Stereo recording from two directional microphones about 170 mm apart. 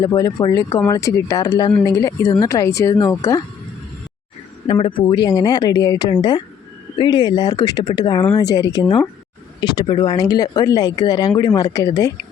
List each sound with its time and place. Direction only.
0.0 s speech: 25° left (ahead or behind)
4.6 s speech: 30° left (ahead or behind)